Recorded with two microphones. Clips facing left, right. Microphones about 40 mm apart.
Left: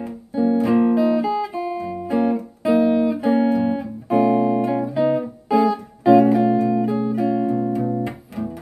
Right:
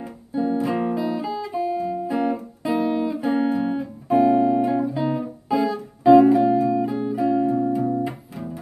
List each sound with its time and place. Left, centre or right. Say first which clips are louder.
0.0 s guitar: left 4 dB; centre
2.7 s music: left 5 dB; centre
4.6 s guitar: left 3 dB; centre
5.6 s music: left 6 dB; centre